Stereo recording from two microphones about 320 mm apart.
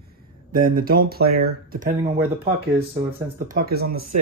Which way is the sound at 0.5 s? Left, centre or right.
Right.